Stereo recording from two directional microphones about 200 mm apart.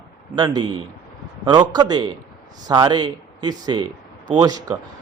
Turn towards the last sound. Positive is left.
turn(degrees=-20)  # may be behind; listen again after turning